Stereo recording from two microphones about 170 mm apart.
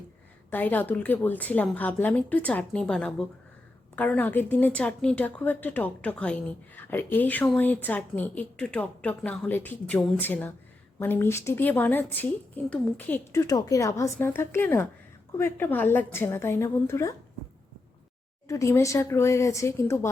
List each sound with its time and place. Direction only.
0.5 s a woman's voice: 10° left (ahead or behind)
18.4 s a woman's voice: 15° left (ahead or behind)